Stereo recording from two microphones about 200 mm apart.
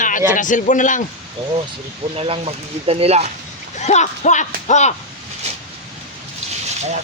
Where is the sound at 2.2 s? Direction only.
30° right (ahead or behind).